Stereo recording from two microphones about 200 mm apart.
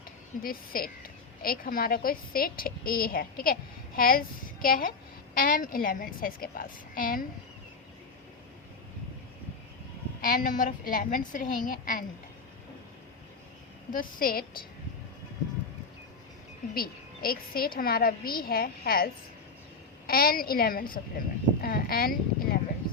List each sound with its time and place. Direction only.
0.4 s a woman's voice: 45° left (ahead or behind)
10.2 s a woman's voice: 40° left (ahead or behind)
13.9 s a woman's voice: 45° left (ahead or behind)
16.7 s a woman's voice: 50° left (ahead or behind)